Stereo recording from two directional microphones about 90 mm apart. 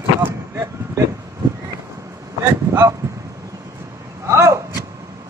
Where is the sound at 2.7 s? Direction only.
30° right (ahead or behind).